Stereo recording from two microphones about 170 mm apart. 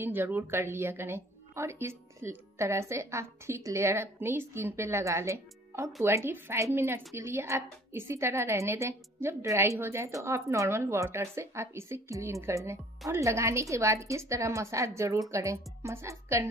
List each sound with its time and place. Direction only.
0.0 s a woman's voice: 10° right (ahead or behind)